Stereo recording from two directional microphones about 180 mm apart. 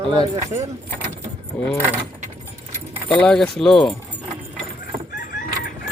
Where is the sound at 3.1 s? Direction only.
5° left (ahead or behind).